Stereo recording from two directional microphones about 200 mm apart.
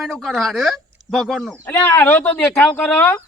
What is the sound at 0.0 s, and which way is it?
Speech, centre (ahead or behind).